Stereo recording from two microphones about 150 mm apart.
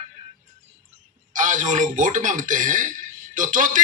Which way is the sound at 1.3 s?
60° right (ahead or behind).